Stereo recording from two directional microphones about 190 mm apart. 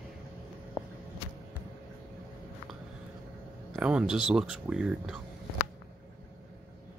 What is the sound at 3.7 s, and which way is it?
Speech, 5° right (ahead or behind).